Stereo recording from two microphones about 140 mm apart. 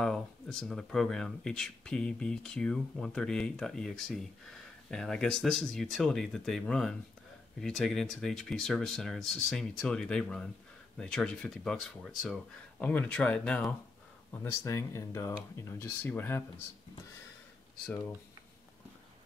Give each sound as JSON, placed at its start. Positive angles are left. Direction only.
{"t": 0.0, "sound": "speech", "side_deg": 5}
{"t": 12.7, "sound": "speech", "side_deg": 10}
{"t": 14.4, "sound": "speech", "side_deg": 20}